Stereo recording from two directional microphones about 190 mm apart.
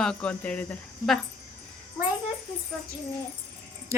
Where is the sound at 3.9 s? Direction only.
15° right (ahead or behind).